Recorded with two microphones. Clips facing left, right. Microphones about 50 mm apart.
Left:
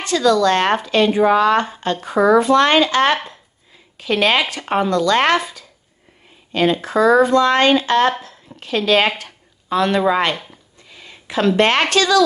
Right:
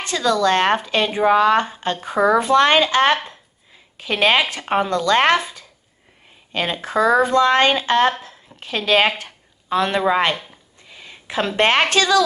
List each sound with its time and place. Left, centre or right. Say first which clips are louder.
0.0 s speech: left 3 dB; right
10.9 s a sound: even; right
11.9 s speech: left 1 dB; right